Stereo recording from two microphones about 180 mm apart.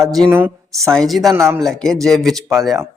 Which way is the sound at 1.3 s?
15° right (ahead or behind).